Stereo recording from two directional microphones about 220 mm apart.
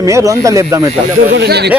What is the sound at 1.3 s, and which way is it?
Speech, 50° right (ahead or behind).